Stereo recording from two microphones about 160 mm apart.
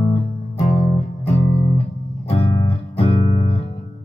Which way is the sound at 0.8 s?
40° left (ahead or behind).